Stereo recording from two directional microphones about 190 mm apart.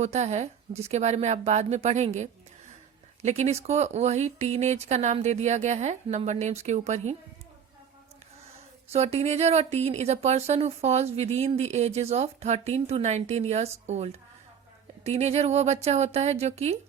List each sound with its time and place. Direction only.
0.0 s speech: 35° right (ahead or behind)
8.9 s speech: 35° right (ahead or behind)